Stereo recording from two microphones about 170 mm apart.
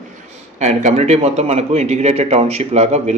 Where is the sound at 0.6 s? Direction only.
45° right (ahead or behind).